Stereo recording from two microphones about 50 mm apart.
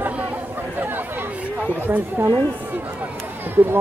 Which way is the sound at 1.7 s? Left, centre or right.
Right.